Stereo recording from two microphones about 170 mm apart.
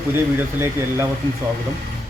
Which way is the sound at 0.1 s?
15° right (ahead or behind).